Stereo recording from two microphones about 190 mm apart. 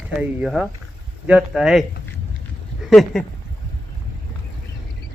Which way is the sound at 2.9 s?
Centre (ahead or behind).